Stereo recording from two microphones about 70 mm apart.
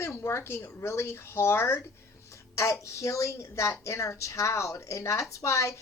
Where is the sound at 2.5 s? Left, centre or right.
Left.